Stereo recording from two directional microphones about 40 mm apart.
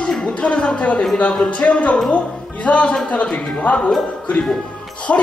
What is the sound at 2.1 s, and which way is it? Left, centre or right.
Music, left.